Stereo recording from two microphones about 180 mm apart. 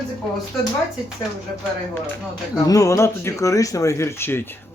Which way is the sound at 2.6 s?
20° left (ahead or behind).